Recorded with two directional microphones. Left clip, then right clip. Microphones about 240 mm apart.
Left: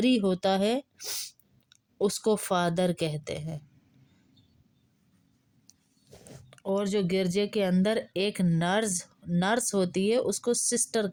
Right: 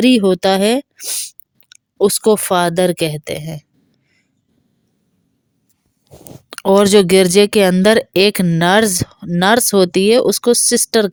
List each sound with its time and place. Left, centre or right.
0.0 s speech: right
6.2 s speech: right